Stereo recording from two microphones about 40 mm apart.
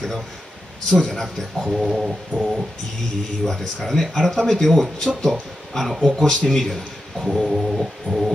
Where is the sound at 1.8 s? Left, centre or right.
Centre.